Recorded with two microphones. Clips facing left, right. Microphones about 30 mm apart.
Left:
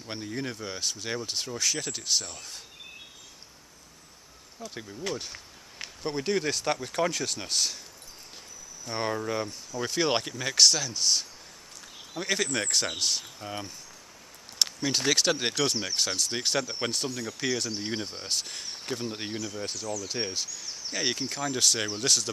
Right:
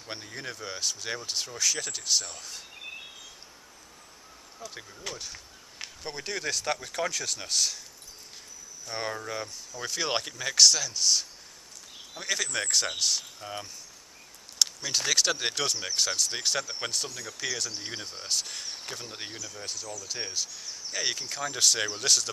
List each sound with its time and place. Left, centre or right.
0.0 s speech: centre
4.6 s speech: centre
5.1 s a sound: centre
6.0 s speech: centre
8.8 s speech: centre
12.5 s speech: centre
12.9 s speech: centre
20.9 s speech: centre